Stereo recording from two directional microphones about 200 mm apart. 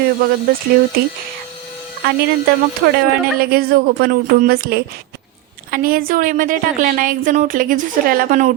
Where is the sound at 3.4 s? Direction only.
50° right (ahead or behind).